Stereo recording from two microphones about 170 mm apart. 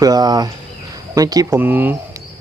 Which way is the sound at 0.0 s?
20° right (ahead or behind).